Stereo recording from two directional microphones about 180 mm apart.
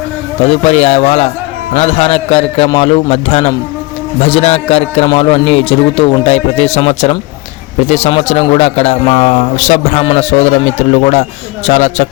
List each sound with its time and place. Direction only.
0.4 s a man's voice: 35° left (ahead or behind)